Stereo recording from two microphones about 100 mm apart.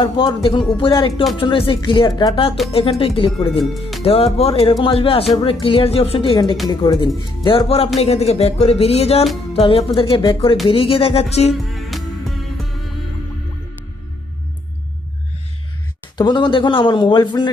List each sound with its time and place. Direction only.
0.0 s speech: 55° left (ahead or behind)
2.7 s music: 75° left (ahead or behind)
3.5 s speech: centre (ahead or behind)
4.0 s music: 75° left (ahead or behind)
4.8 s music: 65° left (ahead or behind)
5.4 s speech: 60° left (ahead or behind)
6.7 s speech: 45° left (ahead or behind)
7.4 s music: 65° left (ahead or behind)
8.0 s speech: 90° left
9.5 s music: 75° left (ahead or behind)
9.9 s speech: 60° left (ahead or behind)
10.7 s music: 65° left (ahead or behind); by 11.5 s 90° left
11.5 s music: centre (ahead or behind)
16.2 s speech: 50° left (ahead or behind)